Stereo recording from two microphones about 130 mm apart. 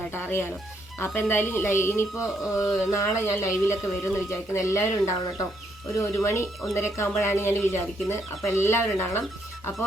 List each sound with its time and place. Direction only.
0.1 s music: 15° left (ahead or behind)
0.9 s speech: 20° left (ahead or behind)